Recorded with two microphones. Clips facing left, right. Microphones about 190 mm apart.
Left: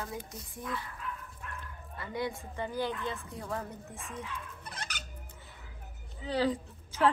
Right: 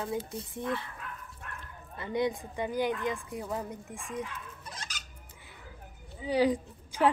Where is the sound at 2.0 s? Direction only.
20° right (ahead or behind).